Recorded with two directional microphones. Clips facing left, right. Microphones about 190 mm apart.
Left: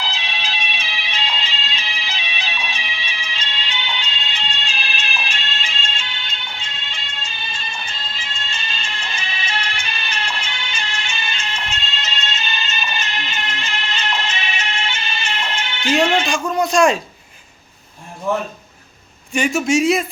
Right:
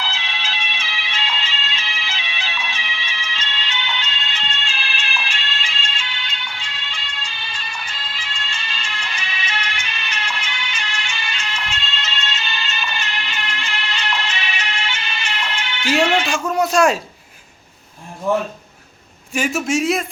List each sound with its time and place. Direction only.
0.0 s music: 15° left (ahead or behind)
16.2 s a sound: 5° right (ahead or behind)
19.3 s a man's voice: 5° right (ahead or behind)